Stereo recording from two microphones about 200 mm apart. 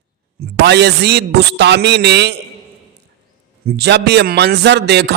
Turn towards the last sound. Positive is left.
turn(degrees=-55)  # may be behind; listen again after turning